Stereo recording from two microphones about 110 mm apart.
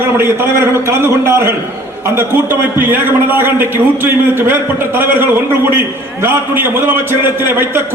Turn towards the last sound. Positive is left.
turn(degrees=-20)  # may be behind; listen again after turning